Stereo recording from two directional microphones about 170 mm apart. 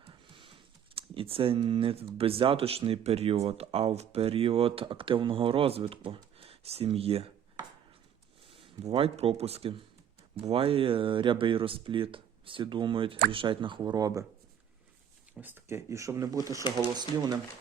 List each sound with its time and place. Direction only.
0.0 s a sound: 30° right (ahead or behind)
0.9 s speech: 35° right (ahead or behind)
8.4 s speech: 30° right (ahead or behind)
15.4 s speech: 10° right (ahead or behind)